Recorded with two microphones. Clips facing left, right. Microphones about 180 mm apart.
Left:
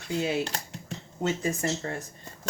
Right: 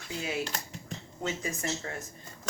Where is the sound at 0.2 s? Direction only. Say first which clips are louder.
Left 5 dB; 30° left (ahead or behind).